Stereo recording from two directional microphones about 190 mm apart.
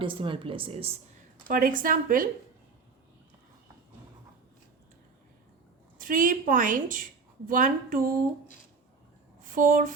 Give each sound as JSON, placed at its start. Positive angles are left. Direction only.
{"t": 0.0, "sound": "speech", "side_deg": -25}
{"t": 1.5, "sound": "a woman's voice", "side_deg": -45}
{"t": 6.0, "sound": "a woman's voice", "side_deg": -45}
{"t": 9.4, "sound": "speech", "side_deg": -45}